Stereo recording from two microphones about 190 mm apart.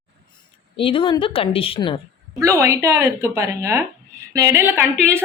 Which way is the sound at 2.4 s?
15° right (ahead or behind).